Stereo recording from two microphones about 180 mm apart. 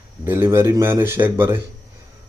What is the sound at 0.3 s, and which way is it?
Speech, 15° right (ahead or behind).